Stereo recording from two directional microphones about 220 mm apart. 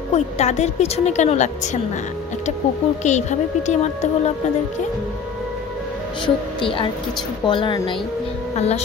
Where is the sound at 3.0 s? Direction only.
30° left (ahead or behind).